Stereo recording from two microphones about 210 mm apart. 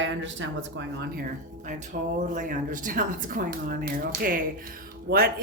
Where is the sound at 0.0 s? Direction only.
60° right (ahead or behind).